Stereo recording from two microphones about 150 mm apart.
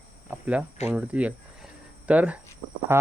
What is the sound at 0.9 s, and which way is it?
Speech, 10° right (ahead or behind).